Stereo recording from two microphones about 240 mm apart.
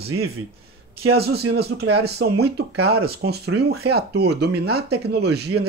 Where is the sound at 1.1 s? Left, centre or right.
Right.